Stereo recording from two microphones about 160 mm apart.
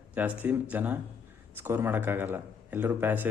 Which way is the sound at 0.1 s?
10° right (ahead or behind).